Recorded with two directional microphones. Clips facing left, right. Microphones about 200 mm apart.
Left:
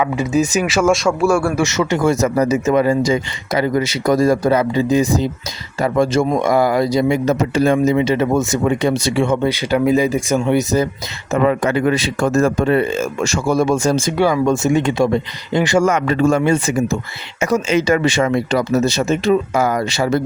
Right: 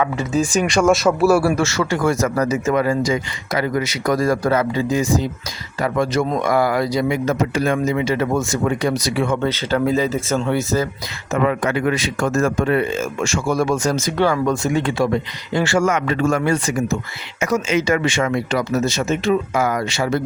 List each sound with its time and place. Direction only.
0.0 s speech: 10° left (ahead or behind)
1.5 s speech: 20° left (ahead or behind)
9.4 s speech: 15° left (ahead or behind)
11.3 s speech: 30° left (ahead or behind)
13.6 s speech: 25° left (ahead or behind)
14.2 s speech: 10° left (ahead or behind)
14.4 s speech: 25° left (ahead or behind)
15.9 s speech: 35° left (ahead or behind)